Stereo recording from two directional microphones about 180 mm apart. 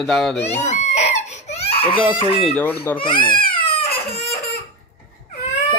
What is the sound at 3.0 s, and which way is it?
Speech, 25° left (ahead or behind).